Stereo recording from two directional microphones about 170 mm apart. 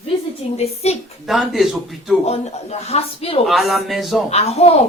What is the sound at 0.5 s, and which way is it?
Speech, 40° left (ahead or behind).